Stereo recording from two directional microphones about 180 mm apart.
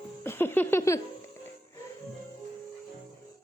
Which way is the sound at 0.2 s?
10° left (ahead or behind).